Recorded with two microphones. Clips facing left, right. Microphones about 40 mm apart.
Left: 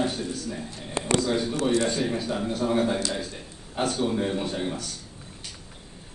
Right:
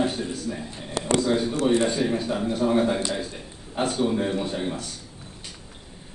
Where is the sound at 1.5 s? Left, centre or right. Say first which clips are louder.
Right 3 dB; right.